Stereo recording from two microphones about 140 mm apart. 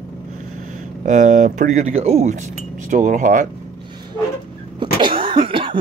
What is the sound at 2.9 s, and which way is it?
Speech, 65° right (ahead or behind).